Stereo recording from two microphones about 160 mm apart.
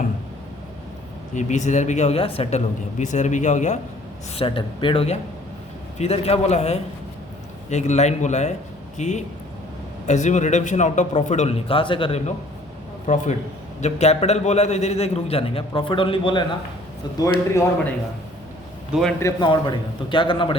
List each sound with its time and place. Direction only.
1.4 s speech: 50° left (ahead or behind)
4.4 s a man's voice: 35° left (ahead or behind)
13.1 s a man's voice: 50° left (ahead or behind); by 16.4 s 30° left (ahead or behind)
17.2 s a man's voice: 20° left (ahead or behind)
19.2 s a man's voice: 30° left (ahead or behind)